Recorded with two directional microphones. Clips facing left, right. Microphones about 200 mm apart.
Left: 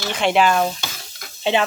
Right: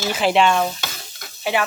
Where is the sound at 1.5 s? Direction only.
25° left (ahead or behind).